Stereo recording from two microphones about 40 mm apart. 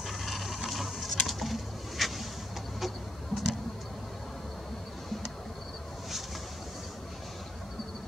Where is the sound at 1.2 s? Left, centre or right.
Centre.